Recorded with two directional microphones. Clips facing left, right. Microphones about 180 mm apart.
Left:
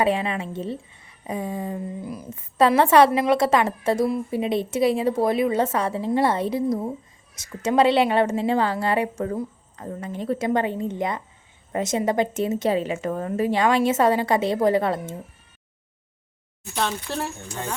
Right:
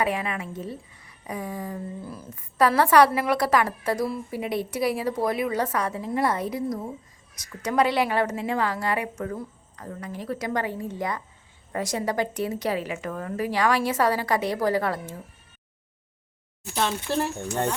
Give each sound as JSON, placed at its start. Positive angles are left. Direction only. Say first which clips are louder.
{"t": 0.0, "sound": "a woman's voice", "louder": "left 4 dB", "side_deg": 25}